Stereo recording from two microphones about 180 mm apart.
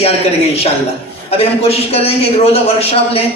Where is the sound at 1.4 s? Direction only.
35° left (ahead or behind).